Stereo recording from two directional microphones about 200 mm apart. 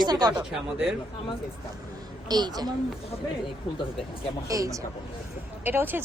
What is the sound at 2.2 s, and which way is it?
Speech, 20° right (ahead or behind).